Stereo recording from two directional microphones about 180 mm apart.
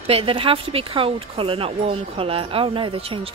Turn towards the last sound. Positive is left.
turn(degrees=-30)  # may be behind; listen again after turning